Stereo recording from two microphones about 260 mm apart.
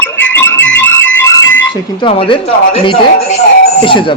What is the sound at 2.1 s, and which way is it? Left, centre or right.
Speech, left.